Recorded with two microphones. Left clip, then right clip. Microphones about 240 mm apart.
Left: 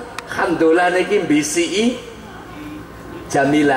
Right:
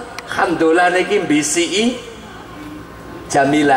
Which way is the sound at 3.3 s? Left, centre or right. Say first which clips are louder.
Right 2 dB; centre.